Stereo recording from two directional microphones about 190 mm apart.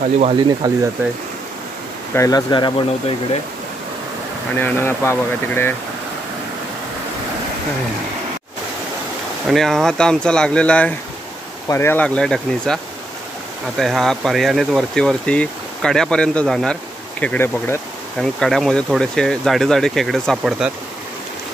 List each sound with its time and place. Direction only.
0.6 s speech: 20° right (ahead or behind)
2.1 s speech: 20° left (ahead or behind)
4.6 s speech: 10° left (ahead or behind)
9.5 s speech: centre (ahead or behind)